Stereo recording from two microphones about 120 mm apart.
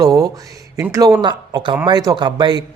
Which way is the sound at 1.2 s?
35° right (ahead or behind).